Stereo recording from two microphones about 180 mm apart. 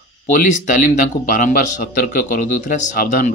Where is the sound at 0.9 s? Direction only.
50° left (ahead or behind).